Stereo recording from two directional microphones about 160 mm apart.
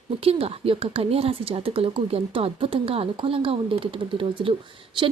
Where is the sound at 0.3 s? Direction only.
35° right (ahead or behind).